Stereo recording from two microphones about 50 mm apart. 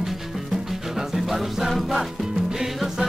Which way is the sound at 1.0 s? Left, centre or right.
Centre.